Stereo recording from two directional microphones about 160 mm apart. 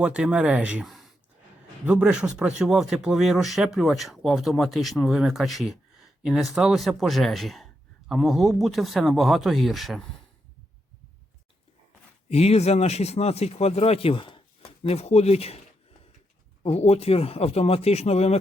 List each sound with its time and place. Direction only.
0.0 s speech: 5° right (ahead or behind)
12.3 s speech: 40° left (ahead or behind)
16.6 s speech: 40° left (ahead or behind)